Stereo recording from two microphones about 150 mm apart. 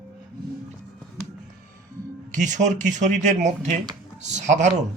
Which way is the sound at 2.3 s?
55° right (ahead or behind).